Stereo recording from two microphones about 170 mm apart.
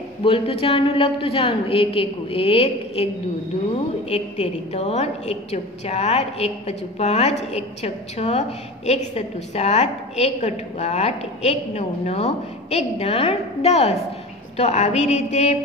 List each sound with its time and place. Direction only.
0.2 s a woman's voice: 35° left (ahead or behind)
4.1 s a woman's voice: 40° left (ahead or behind)